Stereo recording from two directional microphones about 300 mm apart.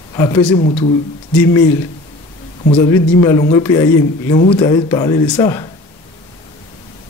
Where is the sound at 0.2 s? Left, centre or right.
Centre.